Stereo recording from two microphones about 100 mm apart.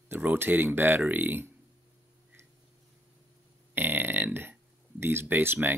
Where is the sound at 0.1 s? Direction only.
20° right (ahead or behind).